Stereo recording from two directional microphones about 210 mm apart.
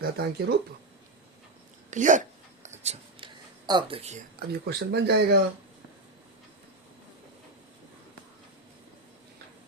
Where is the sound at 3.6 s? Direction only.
20° right (ahead or behind).